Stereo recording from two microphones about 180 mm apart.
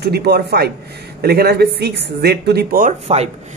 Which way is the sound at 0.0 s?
65° right (ahead or behind).